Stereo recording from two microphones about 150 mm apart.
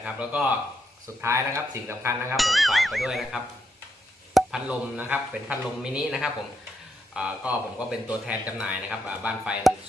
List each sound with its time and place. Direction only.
0.0 s speech: 10° right (ahead or behind)
1.2 s speech: 20° right (ahead or behind)
2.3 s speech: centre (ahead or behind)